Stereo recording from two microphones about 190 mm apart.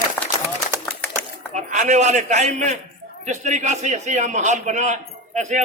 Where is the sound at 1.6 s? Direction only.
40° right (ahead or behind).